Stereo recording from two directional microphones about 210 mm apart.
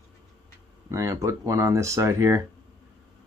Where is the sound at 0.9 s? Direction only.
15° right (ahead or behind).